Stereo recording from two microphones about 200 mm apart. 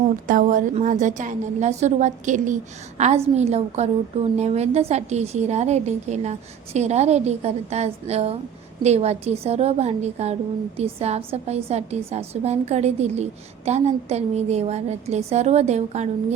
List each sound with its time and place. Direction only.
0.3 s a woman's voice: 40° right (ahead or behind)